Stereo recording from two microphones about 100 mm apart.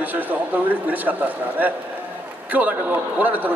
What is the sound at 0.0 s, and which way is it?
A man's voice, 15° right (ahead or behind).